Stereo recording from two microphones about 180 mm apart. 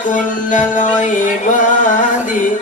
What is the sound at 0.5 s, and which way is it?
Music, 45° left (ahead or behind).